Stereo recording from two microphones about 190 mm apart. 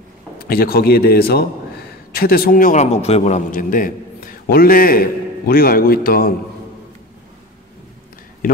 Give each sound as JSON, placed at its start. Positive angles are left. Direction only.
{"t": 0.4, "sound": "a man's voice", "side_deg": 50}